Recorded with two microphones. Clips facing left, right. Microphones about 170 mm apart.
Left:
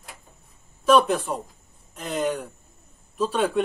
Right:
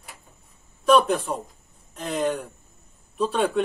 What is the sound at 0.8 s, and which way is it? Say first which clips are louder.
A man's voice: even; centre (ahead or behind).